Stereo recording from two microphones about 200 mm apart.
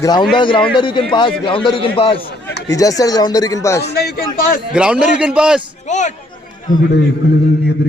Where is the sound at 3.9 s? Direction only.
55° left (ahead or behind).